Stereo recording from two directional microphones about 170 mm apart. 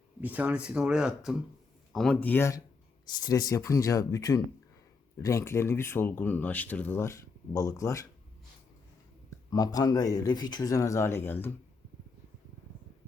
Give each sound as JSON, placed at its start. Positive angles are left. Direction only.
{"t": 0.2, "sound": "speech", "side_deg": -10}
{"t": 9.5, "sound": "speech", "side_deg": 20}